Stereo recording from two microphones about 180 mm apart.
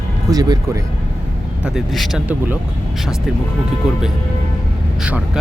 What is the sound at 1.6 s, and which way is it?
Speech, centre (ahead or behind).